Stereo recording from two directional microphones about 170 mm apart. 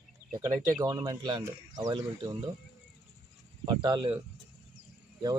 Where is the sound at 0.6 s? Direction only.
20° right (ahead or behind).